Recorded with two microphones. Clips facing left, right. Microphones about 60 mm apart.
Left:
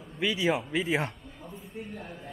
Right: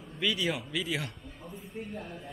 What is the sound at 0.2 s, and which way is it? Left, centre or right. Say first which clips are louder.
Speech: left 4 dB; left.